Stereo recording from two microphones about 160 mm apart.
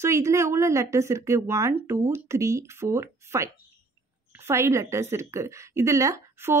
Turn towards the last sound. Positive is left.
turn(degrees=-20)  # may be behind; listen again after turning